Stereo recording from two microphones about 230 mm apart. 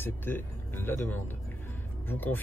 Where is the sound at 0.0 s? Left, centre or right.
Centre.